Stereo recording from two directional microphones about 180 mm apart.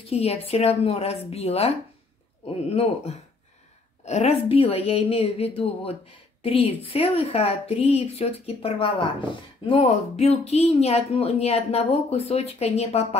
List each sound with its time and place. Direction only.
0.1 s speech: 35° left (ahead or behind)